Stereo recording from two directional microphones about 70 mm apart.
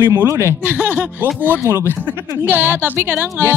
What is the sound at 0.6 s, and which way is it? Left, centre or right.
Speech, right.